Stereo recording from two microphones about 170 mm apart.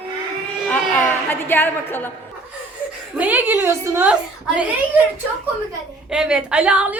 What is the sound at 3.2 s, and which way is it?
A woman's voice, 10° right (ahead or behind).